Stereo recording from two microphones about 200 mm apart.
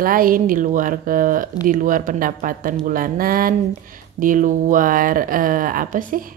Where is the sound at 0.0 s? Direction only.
45° right (ahead or behind).